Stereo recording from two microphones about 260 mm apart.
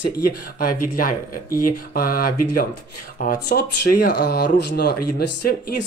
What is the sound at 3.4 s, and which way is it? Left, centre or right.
Speech, left.